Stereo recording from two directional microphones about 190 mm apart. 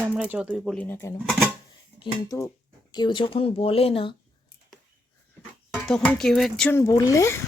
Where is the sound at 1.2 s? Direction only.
Centre (ahead or behind).